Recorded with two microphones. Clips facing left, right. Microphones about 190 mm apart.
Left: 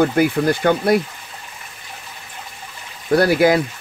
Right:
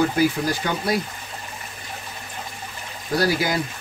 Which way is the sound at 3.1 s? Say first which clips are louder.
Left 8 dB; 60° left (ahead or behind).